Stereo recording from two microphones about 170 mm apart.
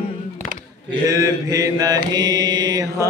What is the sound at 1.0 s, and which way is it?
Mantra, 20° right (ahead or behind).